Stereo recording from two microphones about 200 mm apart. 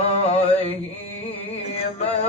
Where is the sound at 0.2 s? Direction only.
30° left (ahead or behind).